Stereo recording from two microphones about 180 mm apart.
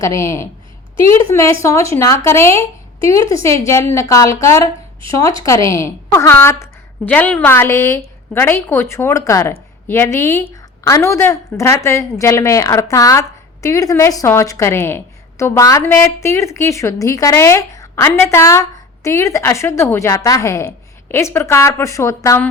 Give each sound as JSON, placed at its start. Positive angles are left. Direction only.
{"t": 0.0, "sound": "a woman's voice", "side_deg": 20}